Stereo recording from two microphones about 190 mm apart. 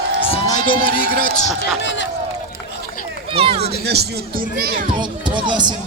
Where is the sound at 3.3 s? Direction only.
30° right (ahead or behind).